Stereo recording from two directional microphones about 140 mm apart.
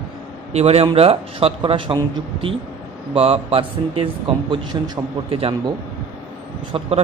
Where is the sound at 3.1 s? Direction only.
45° right (ahead or behind); by 5.4 s 30° right (ahead or behind).